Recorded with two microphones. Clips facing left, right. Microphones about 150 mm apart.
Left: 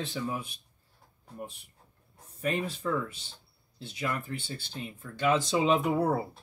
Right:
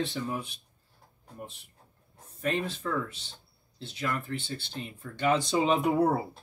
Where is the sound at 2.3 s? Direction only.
10° left (ahead or behind).